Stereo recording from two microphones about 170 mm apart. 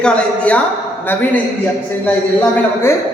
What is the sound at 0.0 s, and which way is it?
A man's voice, 5° left (ahead or behind).